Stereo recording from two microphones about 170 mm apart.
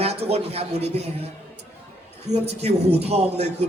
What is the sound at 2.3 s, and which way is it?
A man's voice, 40° right (ahead or behind).